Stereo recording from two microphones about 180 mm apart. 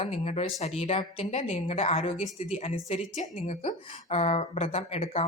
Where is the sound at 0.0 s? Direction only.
35° left (ahead or behind).